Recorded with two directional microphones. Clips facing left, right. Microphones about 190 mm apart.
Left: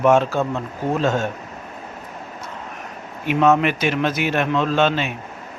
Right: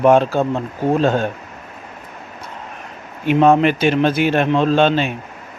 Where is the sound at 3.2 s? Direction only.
30° right (ahead or behind).